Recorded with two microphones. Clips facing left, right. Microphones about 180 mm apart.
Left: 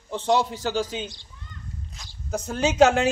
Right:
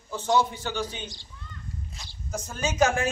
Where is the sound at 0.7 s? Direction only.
90° left; by 1.3 s 75° left (ahead or behind).